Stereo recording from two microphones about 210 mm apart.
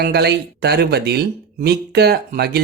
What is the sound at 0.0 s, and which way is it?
Speech, 50° right (ahead or behind).